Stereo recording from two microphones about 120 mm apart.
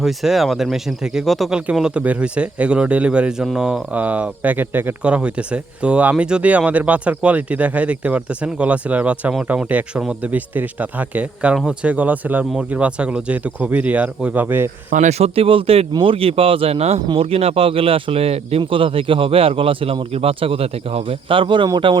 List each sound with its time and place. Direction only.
0.0 s speech: centre (ahead or behind); by 14.7 s 15° right (ahead or behind)
14.9 s speech: 90° right
15.4 s speech: 50° right (ahead or behind)